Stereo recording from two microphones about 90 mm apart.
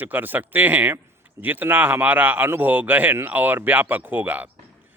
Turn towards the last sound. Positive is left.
turn(degrees=-20)  # may be behind; listen again after turning